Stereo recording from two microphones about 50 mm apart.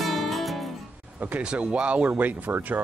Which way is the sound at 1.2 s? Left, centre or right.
Right.